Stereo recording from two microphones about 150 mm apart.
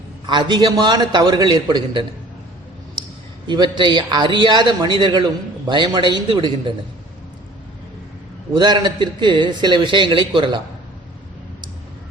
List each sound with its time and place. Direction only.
0.3 s a man's voice: 30° right (ahead or behind)
3.4 s a man's voice: 30° right (ahead or behind)
8.5 s a man's voice: 30° right (ahead or behind)